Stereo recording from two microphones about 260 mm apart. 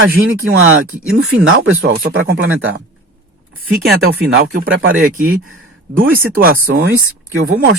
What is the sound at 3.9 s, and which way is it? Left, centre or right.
Speech, right.